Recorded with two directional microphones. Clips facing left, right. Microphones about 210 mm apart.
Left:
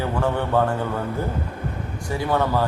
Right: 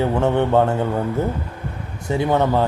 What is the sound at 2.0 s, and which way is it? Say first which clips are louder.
Speech: right 4 dB; 20° right (ahead or behind).